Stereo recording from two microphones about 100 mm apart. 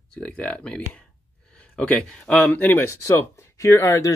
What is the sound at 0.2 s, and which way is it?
Speech, 15° left (ahead or behind).